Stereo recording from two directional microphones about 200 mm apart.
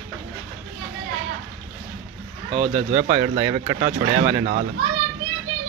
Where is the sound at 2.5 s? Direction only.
25° right (ahead or behind).